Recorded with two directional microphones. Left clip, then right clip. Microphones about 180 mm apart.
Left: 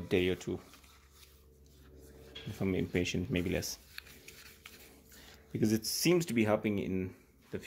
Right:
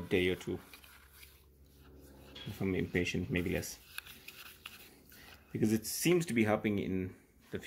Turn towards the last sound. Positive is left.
turn(degrees=15)  # may be behind; listen again after turning